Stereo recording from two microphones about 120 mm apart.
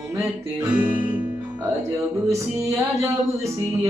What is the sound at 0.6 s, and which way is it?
Guitar, 45° right (ahead or behind).